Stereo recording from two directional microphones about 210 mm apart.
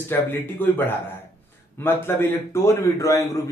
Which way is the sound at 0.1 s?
10° left (ahead or behind).